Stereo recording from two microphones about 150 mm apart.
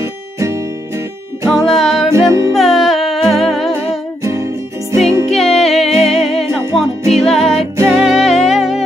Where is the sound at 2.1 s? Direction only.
20° right (ahead or behind).